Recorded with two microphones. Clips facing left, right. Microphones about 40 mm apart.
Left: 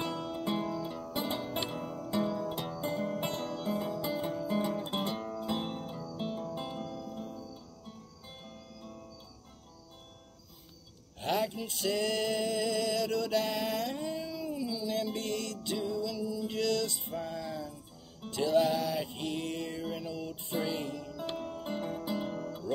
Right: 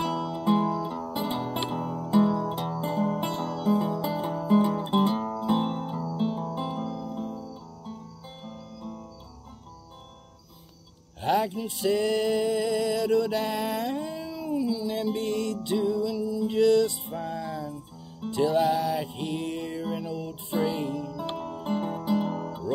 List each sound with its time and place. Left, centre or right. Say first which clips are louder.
0.0 s music: right 7 dB; centre
0.5 s music: right 10 dB; centre
3.3 s music: right 7 dB; centre
3.7 s music: right 6 dB; centre
6.8 s music: right 7 dB; centre
8.5 s music: right 11 dB; centre
11.1 s music: right 6 dB; centre